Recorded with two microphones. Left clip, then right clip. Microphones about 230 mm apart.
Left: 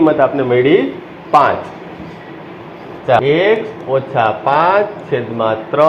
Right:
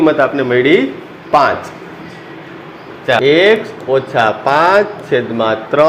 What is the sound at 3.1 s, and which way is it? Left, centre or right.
A man's voice, right.